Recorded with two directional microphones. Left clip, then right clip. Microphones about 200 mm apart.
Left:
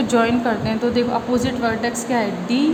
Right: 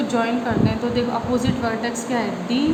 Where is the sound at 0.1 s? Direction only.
40° left (ahead or behind).